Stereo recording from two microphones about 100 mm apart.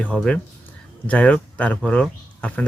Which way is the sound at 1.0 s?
15° left (ahead or behind).